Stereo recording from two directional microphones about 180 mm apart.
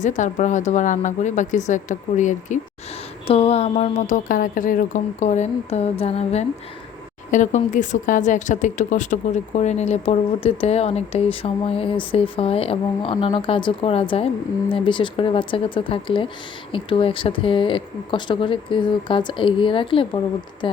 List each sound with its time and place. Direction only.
0.0 s speech: 45° left (ahead or behind)